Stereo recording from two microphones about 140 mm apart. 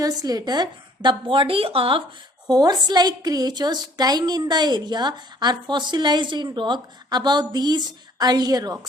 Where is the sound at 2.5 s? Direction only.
30° right (ahead or behind).